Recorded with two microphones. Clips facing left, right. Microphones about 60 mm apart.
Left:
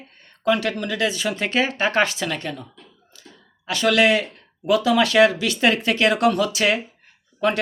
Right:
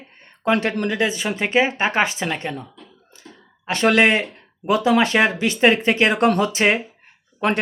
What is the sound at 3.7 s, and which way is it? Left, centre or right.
Speech, right.